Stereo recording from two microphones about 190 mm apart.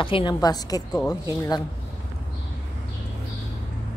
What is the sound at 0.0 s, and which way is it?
A woman's voice, 25° left (ahead or behind).